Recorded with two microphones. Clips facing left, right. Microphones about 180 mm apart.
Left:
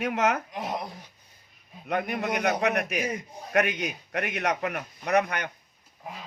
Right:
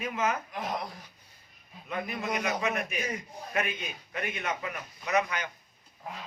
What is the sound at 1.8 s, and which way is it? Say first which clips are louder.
A man's voice: left 5 dB; 70° left (ahead or behind).